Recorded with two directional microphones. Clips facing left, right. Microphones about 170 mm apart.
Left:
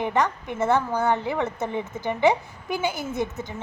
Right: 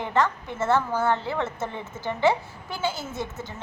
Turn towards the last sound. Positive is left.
turn(degrees=20)  # may be behind; listen again after turning